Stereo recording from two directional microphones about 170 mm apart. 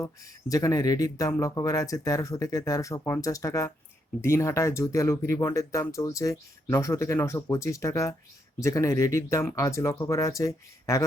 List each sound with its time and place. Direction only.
0.0 s speech: 20° left (ahead or behind)